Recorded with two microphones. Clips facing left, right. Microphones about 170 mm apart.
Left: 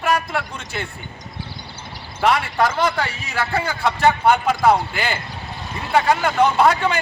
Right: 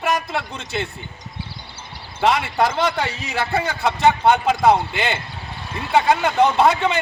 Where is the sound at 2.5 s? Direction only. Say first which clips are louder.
Even; 20° right (ahead or behind).